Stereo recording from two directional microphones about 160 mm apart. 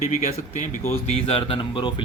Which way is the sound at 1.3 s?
35° left (ahead or behind).